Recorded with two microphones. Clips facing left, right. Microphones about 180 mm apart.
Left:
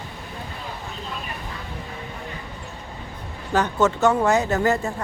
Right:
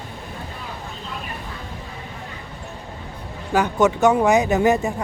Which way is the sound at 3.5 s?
15° right (ahead or behind).